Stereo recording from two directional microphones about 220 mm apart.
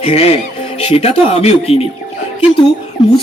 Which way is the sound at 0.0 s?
30° left (ahead or behind).